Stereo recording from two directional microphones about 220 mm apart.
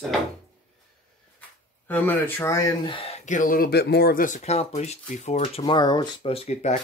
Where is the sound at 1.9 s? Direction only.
10° left (ahead or behind); by 6.8 s 30° left (ahead or behind).